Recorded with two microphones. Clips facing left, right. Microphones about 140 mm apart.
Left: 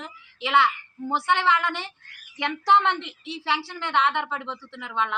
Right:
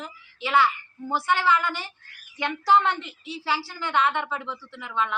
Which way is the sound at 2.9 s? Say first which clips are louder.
Left 1 dB; 25° left (ahead or behind).